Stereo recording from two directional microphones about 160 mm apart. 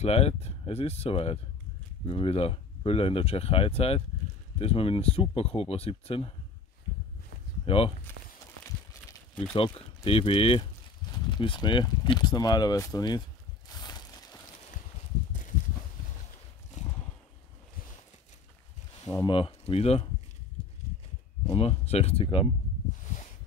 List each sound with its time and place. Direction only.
0.0 s speech: 40° left (ahead or behind)
7.6 s speech: 35° left (ahead or behind)
9.5 s speech: 35° left (ahead or behind)
13.7 s a sound: 25° left (ahead or behind)
19.0 s speech: 20° left (ahead or behind)
19.3 s speech: 35° left (ahead or behind)
21.5 s speech: 40° left (ahead or behind)